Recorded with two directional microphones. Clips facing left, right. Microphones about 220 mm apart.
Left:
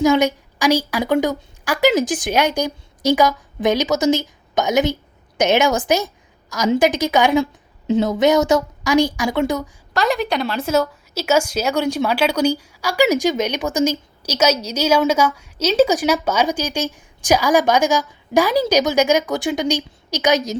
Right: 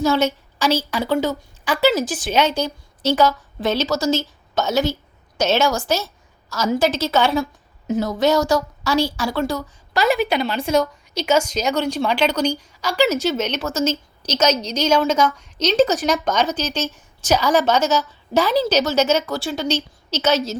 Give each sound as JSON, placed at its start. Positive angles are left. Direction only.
{"t": 0.0, "sound": "a woman's voice", "side_deg": 15}
{"t": 9.9, "sound": "a woman's voice", "side_deg": 0}